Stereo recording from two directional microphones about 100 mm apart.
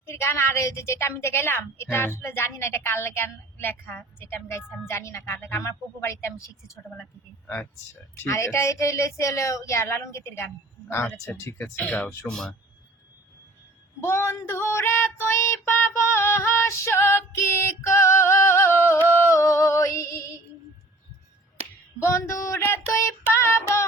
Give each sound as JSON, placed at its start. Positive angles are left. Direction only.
{"t": 0.0, "sound": "a woman's voice", "side_deg": 25}
{"t": 7.4, "sound": "speech", "side_deg": 10}
{"t": 8.1, "sound": "speech", "side_deg": 30}
{"t": 14.0, "sound": "a woman's voice", "side_deg": 25}
{"t": 17.8, "sound": "singing", "side_deg": 25}
{"t": 21.9, "sound": "a woman's voice", "side_deg": 30}
{"t": 23.4, "sound": "female singing", "side_deg": 25}